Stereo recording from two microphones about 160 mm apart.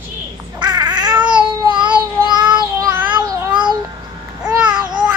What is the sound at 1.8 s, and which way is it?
Child singing, 30° right (ahead or behind).